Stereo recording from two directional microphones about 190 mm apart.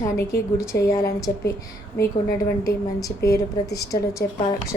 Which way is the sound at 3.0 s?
20° left (ahead or behind).